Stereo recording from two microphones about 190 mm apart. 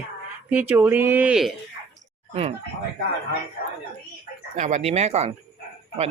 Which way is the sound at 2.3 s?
30° right (ahead or behind).